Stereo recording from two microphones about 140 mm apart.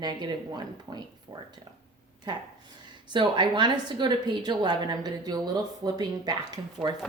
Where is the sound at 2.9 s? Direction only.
35° right (ahead or behind).